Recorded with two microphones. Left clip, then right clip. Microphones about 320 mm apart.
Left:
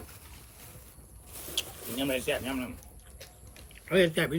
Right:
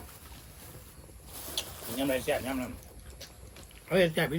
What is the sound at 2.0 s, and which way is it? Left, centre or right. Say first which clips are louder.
Speech: right 1 dB; centre.